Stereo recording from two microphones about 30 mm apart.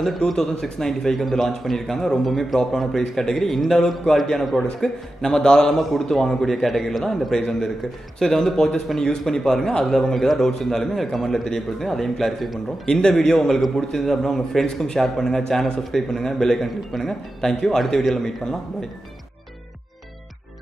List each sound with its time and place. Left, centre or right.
0.3 s a man's voice: centre
5.2 s a man's voice: left
5.8 s a man's voice: centre
12.8 s a man's voice: left
13.1 s a man's voice: centre
14.2 s a man's voice: centre
14.7 s a man's voice: left
15.0 s a man's voice: centre